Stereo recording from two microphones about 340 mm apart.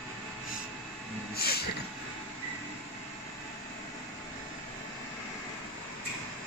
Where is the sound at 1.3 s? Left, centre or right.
Left.